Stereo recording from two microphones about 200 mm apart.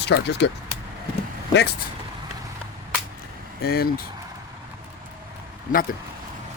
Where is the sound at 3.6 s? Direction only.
50° left (ahead or behind).